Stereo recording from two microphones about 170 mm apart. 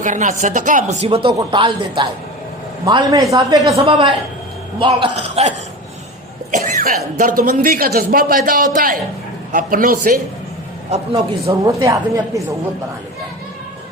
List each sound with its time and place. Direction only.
0.0 s a woman's voice: 50° right (ahead or behind)
6.5 s a man's voice: 50° right (ahead or behind)
10.9 s speech: 35° right (ahead or behind)
11.6 s a woman's voice: 20° right (ahead or behind)